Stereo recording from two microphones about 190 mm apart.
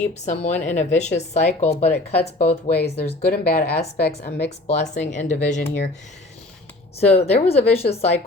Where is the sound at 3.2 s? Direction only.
55° left (ahead or behind).